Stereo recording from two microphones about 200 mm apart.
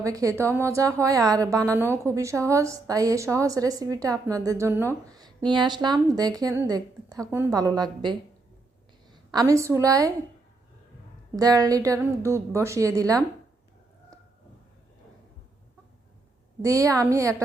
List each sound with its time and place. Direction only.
0.0 s a woman's voice: 15° right (ahead or behind)
9.3 s a woman's voice: 15° right (ahead or behind)
11.3 s a woman's voice: 20° right (ahead or behind)
16.6 s a woman's voice: 15° right (ahead or behind)